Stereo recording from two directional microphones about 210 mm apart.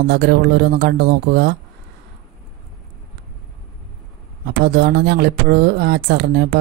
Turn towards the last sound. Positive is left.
turn(degrees=-55)  # may be behind; listen again after turning